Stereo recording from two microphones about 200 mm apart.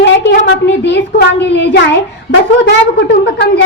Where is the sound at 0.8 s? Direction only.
60° left (ahead or behind).